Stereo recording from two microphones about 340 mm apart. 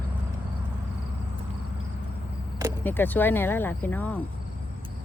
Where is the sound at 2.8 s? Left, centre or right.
Centre.